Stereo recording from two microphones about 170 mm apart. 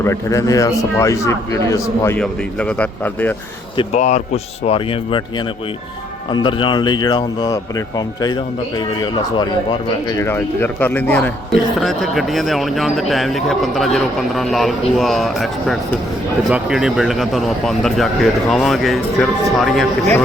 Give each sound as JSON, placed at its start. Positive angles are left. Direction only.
{"t": 0.0, "sound": "a man's voice", "side_deg": 15}
{"t": 2.1, "sound": "a man's voice", "side_deg": 5}
{"t": 3.9, "sound": "speech", "side_deg": 45}
{"t": 6.3, "sound": "a man's voice", "side_deg": 30}